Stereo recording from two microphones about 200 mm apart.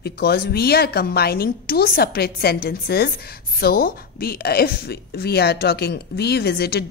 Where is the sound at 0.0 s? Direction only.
50° left (ahead or behind).